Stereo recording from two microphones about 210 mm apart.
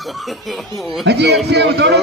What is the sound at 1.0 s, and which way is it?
Speech, 55° right (ahead or behind).